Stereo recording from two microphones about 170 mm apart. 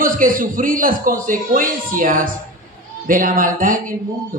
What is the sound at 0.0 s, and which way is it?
A man's voice, 55° right (ahead or behind).